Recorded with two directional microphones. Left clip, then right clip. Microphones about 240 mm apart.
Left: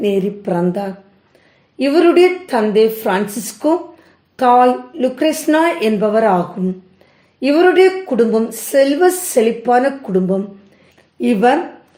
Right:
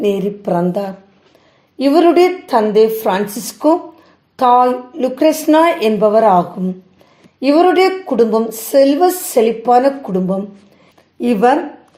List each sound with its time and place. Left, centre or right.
0.0 s a woman's voice: centre
7.4 s a woman's voice: centre